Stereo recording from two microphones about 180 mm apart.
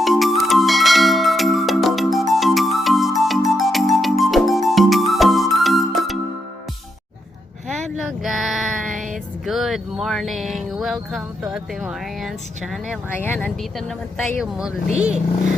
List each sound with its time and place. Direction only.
0.0 s music: centre (ahead or behind)
7.8 s a sound: centre (ahead or behind)
8.9 s music: 45° right (ahead or behind)
9.5 s a sound: centre (ahead or behind)
11.5 s speech: 5° right (ahead or behind)
13.1 s speech: 10° left (ahead or behind)